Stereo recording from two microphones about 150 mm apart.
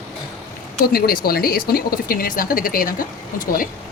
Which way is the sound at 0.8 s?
80° left.